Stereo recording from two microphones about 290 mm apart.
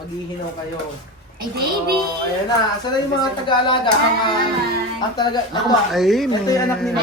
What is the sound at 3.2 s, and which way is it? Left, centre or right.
Speech, centre.